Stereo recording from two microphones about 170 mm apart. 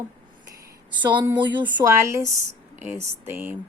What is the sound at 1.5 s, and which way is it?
A woman's voice, 10° right (ahead or behind).